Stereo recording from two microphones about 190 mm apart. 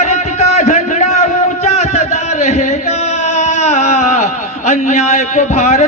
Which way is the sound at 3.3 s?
35° left (ahead or behind).